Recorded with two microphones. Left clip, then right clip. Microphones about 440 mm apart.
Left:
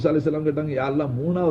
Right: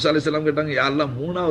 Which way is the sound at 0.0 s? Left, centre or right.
Centre.